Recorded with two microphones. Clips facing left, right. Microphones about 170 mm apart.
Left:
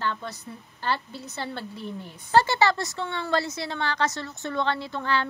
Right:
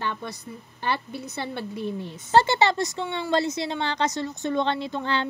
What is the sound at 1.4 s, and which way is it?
A woman's voice, 20° right (ahead or behind).